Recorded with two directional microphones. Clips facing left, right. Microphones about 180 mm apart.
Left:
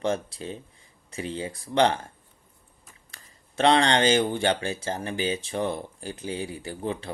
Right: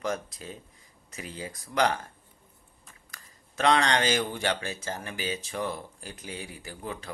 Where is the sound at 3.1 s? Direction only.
30° left (ahead or behind).